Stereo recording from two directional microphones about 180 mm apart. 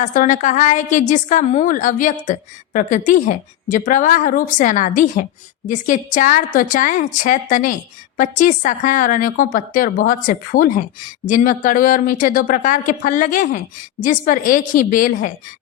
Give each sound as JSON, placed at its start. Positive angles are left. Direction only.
{"t": 0.0, "sound": "a woman's voice", "side_deg": 45}